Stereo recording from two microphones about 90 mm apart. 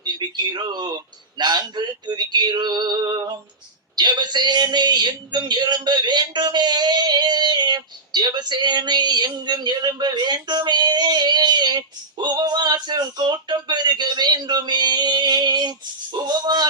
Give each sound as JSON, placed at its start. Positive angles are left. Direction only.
{"t": 0.0, "sound": "a sound", "side_deg": -50}
{"t": 1.4, "sound": "male singing", "side_deg": -55}
{"t": 3.9, "sound": "a man's voice", "side_deg": -55}